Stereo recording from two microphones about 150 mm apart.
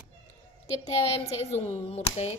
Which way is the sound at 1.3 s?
45° left (ahead or behind).